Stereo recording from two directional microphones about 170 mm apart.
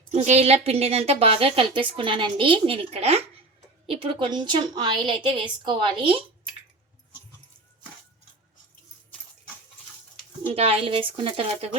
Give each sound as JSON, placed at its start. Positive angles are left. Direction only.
{"t": 0.1, "sound": "a woman's voice", "side_deg": -40}
{"t": 10.5, "sound": "a woman's voice", "side_deg": -35}